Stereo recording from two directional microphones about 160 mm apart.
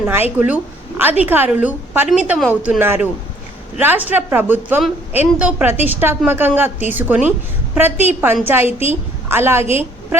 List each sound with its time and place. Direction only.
0.0 s a woman's voice: 15° right (ahead or behind)